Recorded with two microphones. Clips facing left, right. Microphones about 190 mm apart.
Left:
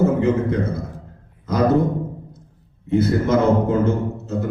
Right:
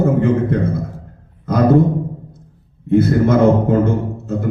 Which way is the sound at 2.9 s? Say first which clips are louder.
Right 4 dB; 55° right (ahead or behind).